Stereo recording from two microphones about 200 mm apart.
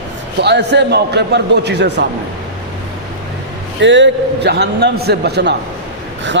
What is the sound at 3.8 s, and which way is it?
A man's voice, 65° right (ahead or behind).